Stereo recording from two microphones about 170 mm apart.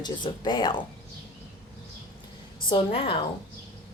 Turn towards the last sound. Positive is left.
turn(degrees=30)  # may be behind; listen again after turning